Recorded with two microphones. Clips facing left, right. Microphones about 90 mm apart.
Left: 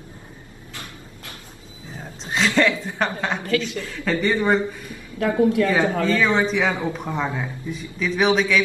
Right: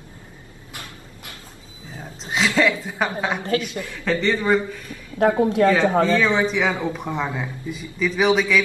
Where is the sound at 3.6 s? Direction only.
20° right (ahead or behind).